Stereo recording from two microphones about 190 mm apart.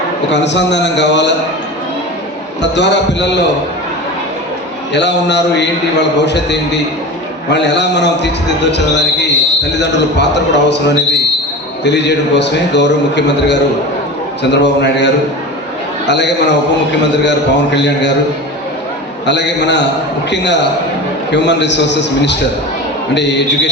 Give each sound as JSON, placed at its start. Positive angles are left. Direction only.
{"t": 0.3, "sound": "a man's voice", "side_deg": 65}
{"t": 2.6, "sound": "a man's voice", "side_deg": 65}
{"t": 4.9, "sound": "a man's voice", "side_deg": 65}
{"t": 19.2, "sound": "a man's voice", "side_deg": 70}